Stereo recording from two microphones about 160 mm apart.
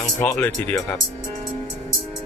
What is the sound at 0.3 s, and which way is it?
Speech, 10° left (ahead or behind).